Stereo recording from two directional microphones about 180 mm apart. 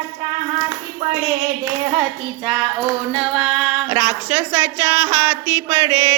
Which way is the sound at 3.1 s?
Centre (ahead or behind).